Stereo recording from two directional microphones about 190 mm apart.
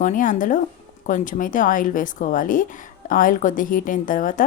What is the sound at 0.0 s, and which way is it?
Speech, 45° left (ahead or behind).